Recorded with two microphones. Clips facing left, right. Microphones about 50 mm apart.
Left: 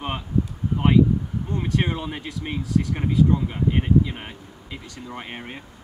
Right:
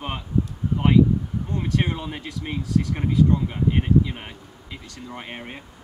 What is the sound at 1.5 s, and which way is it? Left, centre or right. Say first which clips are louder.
Speech: left 1 dB; centre.